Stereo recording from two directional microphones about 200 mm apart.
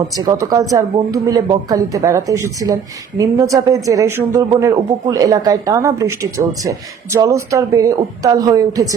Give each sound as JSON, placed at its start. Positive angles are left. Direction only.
{"t": 0.2, "sound": "speech", "side_deg": -20}